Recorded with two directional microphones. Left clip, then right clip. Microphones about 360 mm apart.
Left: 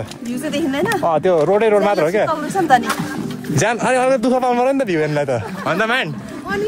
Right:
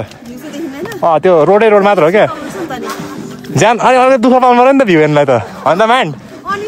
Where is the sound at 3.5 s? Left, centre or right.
Right.